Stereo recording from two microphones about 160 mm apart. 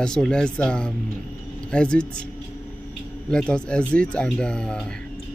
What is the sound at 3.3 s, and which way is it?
Speech, 5° left (ahead or behind).